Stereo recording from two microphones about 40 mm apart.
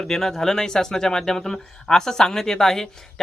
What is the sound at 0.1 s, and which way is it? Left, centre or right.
Speech, centre.